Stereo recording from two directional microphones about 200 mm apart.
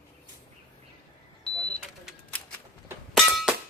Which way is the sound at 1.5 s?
5° left (ahead or behind).